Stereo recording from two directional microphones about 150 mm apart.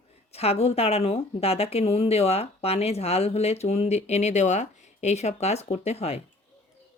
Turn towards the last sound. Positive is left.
turn(degrees=45)  # may be behind; listen again after turning